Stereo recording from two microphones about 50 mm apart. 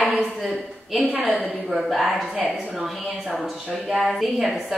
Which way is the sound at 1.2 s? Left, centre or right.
Right.